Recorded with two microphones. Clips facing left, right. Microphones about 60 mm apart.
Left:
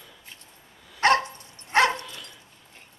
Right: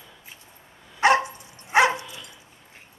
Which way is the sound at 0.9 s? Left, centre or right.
Centre.